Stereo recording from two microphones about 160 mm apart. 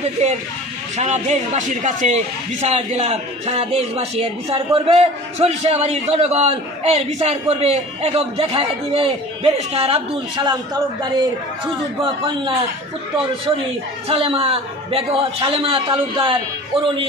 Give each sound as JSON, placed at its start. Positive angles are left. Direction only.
{"t": 0.0, "sound": "a man's voice", "side_deg": -40}
{"t": 14.0, "sound": "a man's voice", "side_deg": -35}